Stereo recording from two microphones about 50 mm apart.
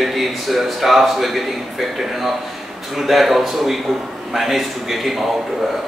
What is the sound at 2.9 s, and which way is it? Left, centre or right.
A man's voice, centre.